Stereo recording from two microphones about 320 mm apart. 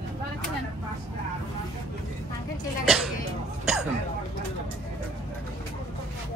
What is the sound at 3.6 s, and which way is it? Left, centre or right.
Speech, centre.